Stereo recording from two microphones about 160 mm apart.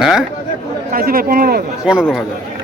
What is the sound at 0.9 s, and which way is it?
Speech, 65° right (ahead or behind).